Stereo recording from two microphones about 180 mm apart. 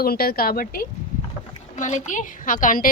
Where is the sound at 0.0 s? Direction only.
55° left (ahead or behind).